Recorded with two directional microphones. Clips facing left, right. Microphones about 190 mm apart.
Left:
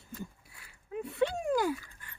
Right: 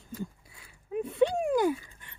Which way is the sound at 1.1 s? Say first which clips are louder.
Right 4 dB; 15° right (ahead or behind).